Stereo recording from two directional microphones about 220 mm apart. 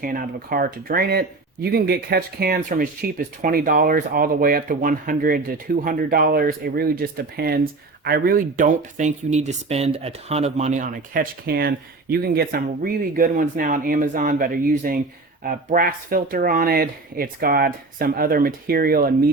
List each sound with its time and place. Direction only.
0.0 s speech: 40° right (ahead or behind)